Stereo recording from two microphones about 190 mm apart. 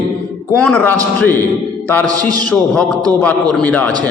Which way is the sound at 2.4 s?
5° left (ahead or behind).